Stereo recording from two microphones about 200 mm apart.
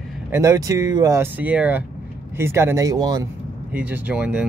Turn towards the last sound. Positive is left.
turn(degrees=-5)  # may be behind; listen again after turning